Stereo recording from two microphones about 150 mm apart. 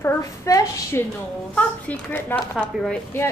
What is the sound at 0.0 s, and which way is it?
A woman's voice, 20° left (ahead or behind).